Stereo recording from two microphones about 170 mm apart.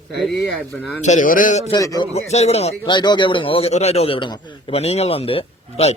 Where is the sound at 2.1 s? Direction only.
40° left (ahead or behind).